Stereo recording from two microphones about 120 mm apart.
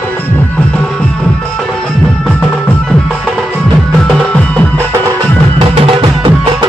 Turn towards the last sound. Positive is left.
turn(degrees=-50)  # may be behind; listen again after turning